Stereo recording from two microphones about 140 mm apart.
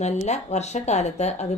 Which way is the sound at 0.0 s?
55° left (ahead or behind).